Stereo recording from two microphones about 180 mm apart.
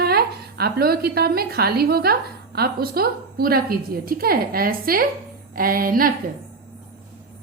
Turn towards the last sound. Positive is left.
turn(degrees=-55)  # may be behind; listen again after turning